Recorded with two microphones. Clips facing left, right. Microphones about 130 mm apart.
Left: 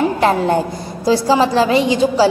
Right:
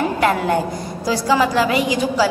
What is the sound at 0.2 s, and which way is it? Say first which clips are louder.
A woman's voice: left 1 dB; 30° left (ahead or behind).